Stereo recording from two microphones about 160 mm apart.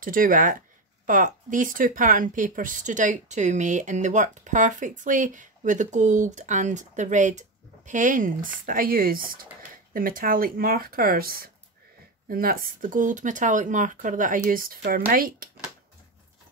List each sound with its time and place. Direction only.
0.0 s speech: 60° right (ahead or behind)